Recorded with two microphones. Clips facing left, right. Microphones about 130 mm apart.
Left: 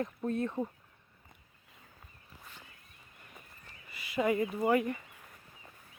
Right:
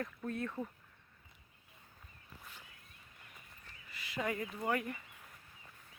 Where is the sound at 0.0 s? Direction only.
25° left (ahead or behind).